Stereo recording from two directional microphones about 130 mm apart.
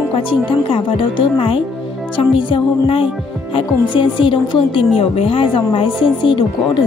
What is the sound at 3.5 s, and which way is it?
A woman's voice, 40° left (ahead or behind).